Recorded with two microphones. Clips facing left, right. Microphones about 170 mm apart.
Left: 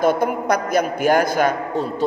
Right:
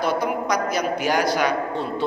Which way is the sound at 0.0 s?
50° left (ahead or behind).